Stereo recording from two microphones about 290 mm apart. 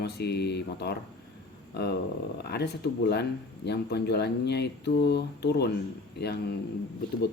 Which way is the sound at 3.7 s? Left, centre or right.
Left.